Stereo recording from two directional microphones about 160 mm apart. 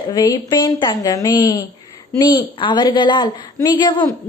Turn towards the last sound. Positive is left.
turn(degrees=25)  # may be behind; listen again after turning